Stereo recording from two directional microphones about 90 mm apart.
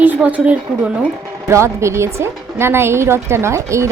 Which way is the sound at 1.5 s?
30° right (ahead or behind).